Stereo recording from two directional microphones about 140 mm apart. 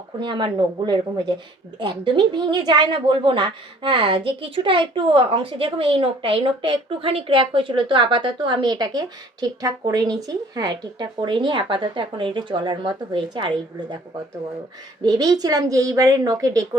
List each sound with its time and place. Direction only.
0.2 s a woman's voice: 35° right (ahead or behind)
15.0 s a woman's voice: 30° right (ahead or behind)